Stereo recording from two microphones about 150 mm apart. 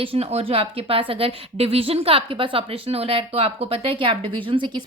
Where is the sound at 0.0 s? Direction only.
40° right (ahead or behind).